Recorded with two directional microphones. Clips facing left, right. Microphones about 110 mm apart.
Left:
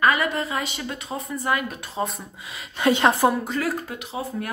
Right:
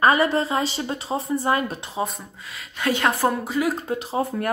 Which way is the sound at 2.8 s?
25° left (ahead or behind).